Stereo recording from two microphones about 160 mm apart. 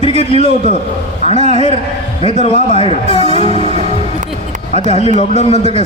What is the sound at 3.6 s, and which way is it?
Music, 40° right (ahead or behind).